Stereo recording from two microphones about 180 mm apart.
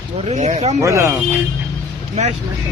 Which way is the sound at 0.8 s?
15° right (ahead or behind).